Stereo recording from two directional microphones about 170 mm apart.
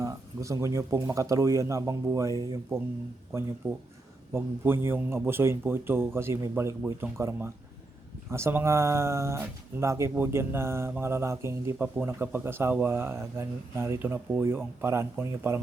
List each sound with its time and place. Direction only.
0.0 s a man's voice: 20° right (ahead or behind)